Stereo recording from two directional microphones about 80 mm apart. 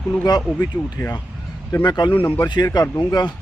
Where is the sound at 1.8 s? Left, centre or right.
Left.